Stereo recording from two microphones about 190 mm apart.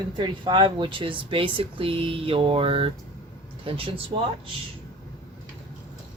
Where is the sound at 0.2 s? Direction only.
25° right (ahead or behind).